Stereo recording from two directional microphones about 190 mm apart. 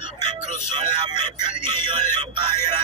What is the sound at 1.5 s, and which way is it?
Music, 25° right (ahead or behind).